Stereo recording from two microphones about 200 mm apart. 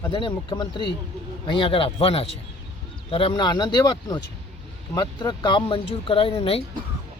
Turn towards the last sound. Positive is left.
turn(degrees=30)  # may be behind; listen again after turning